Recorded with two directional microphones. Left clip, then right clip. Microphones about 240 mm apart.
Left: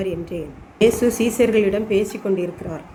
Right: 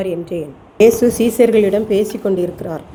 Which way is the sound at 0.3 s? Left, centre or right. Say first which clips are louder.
Right 6 dB; right.